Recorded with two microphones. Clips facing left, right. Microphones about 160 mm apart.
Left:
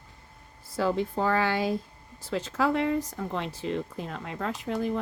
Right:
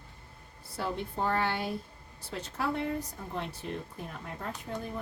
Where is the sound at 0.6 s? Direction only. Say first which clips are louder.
Left 8 dB; 90° left.